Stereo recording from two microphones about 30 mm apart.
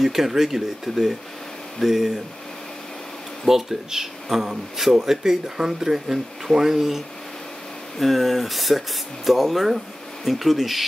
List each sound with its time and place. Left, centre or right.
0.0 s speech: centre
0.9 s speech: centre
1.8 s speech: centre
3.4 s speech: centre
8.0 s speech: centre